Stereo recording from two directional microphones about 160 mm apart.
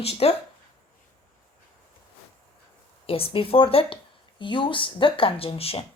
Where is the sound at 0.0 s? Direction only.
40° left (ahead or behind).